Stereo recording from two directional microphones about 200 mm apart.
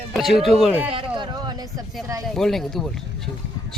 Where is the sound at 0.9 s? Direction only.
25° right (ahead or behind).